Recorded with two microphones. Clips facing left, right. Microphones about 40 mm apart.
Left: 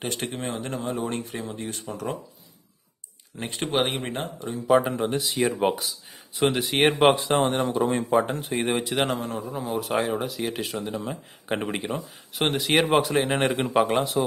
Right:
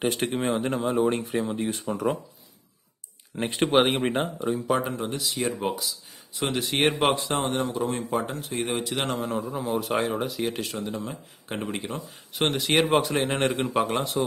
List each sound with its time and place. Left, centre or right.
0.2 s speech: centre
3.3 s speech: centre
4.6 s speech: centre
4.9 s speech: left
6.4 s speech: centre
8.8 s speech: centre
11.0 s speech: centre
11.8 s speech: centre